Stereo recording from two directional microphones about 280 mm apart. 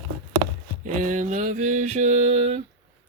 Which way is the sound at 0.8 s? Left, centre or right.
Right.